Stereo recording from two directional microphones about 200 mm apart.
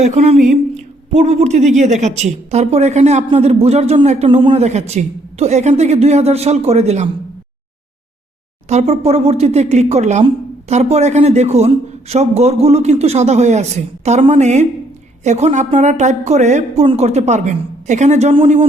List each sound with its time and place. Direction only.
0.0 s a woman's voice: 35° right (ahead or behind)
8.7 s a woman's voice: 35° right (ahead or behind)